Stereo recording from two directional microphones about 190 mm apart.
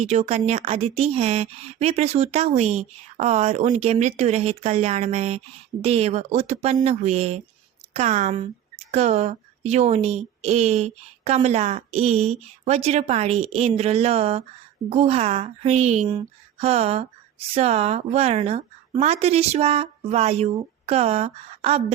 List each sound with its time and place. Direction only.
0.0 s speech: 35° right (ahead or behind)